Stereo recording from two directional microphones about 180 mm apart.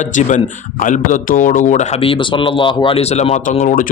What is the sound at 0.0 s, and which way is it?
A man's voice, 45° left (ahead or behind).